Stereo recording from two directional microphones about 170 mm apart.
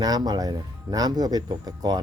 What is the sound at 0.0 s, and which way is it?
Speech, 20° right (ahead or behind).